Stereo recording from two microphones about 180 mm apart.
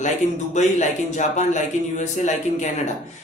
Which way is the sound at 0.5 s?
40° left (ahead or behind).